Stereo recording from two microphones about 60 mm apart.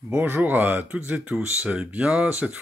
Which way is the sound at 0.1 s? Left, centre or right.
Right.